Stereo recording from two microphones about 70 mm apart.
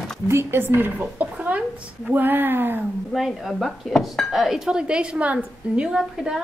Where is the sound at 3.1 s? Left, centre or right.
Centre.